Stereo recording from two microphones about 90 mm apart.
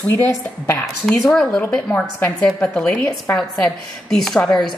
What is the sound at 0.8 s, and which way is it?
A woman's voice, 5° left (ahead or behind).